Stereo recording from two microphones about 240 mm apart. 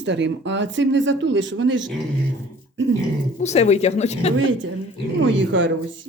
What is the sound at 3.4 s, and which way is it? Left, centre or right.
Speech, left.